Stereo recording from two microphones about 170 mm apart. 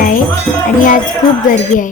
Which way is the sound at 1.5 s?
50° left (ahead or behind).